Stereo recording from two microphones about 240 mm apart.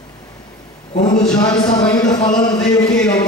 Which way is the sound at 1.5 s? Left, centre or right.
Centre.